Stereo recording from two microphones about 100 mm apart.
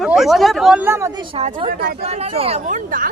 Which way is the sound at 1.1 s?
55° right (ahead or behind).